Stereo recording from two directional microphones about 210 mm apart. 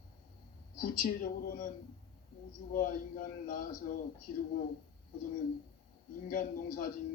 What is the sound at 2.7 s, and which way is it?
Speech, 40° left (ahead or behind).